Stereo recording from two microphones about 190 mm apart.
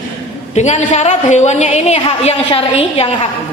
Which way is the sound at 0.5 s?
35° left (ahead or behind).